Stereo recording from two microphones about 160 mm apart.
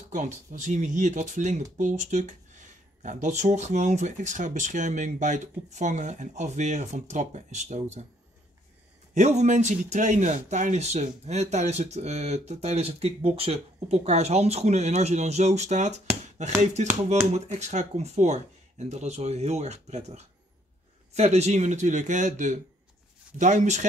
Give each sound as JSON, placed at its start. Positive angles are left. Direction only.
{"t": 0.1, "sound": "speech", "side_deg": -50}
{"t": 9.1, "sound": "speech", "side_deg": -45}